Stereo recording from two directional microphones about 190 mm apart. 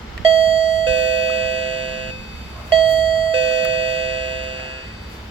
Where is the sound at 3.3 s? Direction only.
25° right (ahead or behind).